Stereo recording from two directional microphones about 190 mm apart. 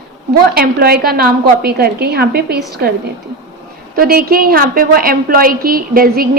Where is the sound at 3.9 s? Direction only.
50° right (ahead or behind).